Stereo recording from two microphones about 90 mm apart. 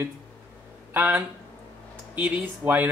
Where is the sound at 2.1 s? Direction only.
15° right (ahead or behind).